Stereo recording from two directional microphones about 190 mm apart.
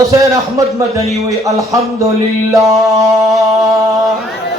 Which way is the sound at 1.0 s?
Centre (ahead or behind).